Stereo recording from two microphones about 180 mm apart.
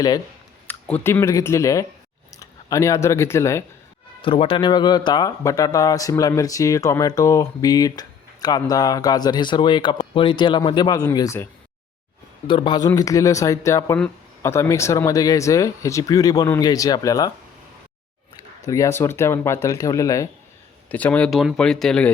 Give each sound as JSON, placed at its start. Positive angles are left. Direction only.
{"t": 0.7, "sound": "speech", "side_deg": 10}
{"t": 4.2, "sound": "a man's voice", "side_deg": 30}
{"t": 12.5, "sound": "a man's voice", "side_deg": 25}
{"t": 18.6, "sound": "speech", "side_deg": 15}
{"t": 20.9, "sound": "speech", "side_deg": 5}